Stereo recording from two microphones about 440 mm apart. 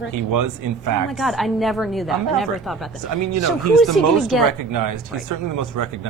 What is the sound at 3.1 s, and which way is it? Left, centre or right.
Speech, right.